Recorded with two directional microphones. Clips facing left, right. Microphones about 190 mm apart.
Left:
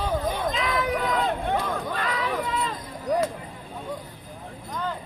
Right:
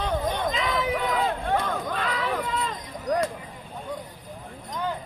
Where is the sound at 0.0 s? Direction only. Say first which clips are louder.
Even; 5° left (ahead or behind).